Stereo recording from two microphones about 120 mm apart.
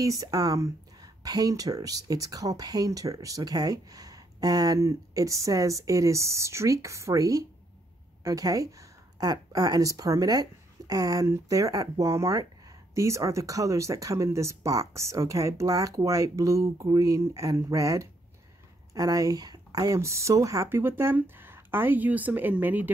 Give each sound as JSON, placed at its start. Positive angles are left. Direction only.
{"t": 0.0, "sound": "speech", "side_deg": -30}